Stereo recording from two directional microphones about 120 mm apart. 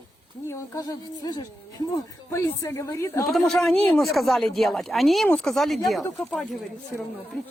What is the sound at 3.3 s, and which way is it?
Speech, 5° left (ahead or behind).